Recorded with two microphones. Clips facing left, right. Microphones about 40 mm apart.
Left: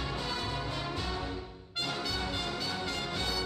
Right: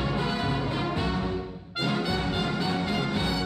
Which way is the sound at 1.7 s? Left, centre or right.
Centre.